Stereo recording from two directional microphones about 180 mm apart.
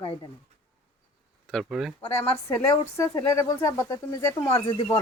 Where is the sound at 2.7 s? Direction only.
15° left (ahead or behind).